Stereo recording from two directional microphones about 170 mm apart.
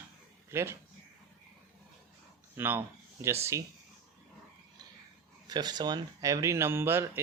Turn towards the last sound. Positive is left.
turn(degrees=-15)  # may be behind; listen again after turning